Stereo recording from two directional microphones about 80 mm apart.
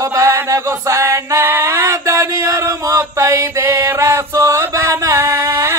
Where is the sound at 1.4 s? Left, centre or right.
Right.